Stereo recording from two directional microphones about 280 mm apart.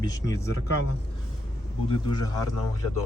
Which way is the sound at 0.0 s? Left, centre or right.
Centre.